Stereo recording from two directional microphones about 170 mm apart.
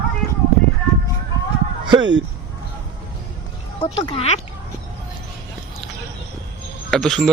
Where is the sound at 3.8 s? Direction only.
30° left (ahead or behind).